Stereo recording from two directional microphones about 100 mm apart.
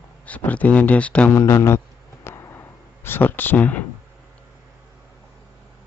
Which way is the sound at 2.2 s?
25° left (ahead or behind).